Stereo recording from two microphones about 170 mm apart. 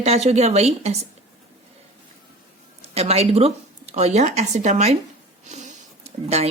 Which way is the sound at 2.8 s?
40° right (ahead or behind).